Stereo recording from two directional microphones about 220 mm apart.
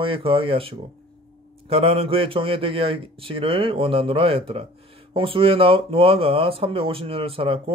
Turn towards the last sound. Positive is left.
turn(degrees=-25)  # may be behind; listen again after turning